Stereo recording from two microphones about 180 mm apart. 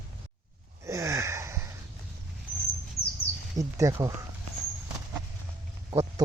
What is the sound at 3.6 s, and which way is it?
Speech, 15° right (ahead or behind).